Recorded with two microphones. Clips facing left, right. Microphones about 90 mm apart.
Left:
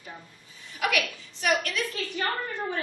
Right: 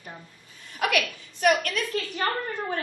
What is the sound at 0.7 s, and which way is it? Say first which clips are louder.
A woman's voice: right 2 dB; 50° right (ahead or behind).